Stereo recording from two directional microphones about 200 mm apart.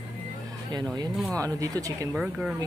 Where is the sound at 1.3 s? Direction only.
15° right (ahead or behind).